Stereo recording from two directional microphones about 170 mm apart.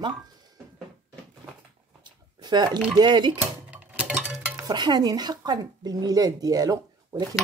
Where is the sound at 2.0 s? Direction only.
25° right (ahead or behind).